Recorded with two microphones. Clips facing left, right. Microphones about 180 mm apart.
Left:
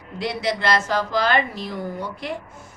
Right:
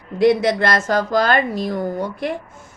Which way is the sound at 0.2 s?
50° right (ahead or behind).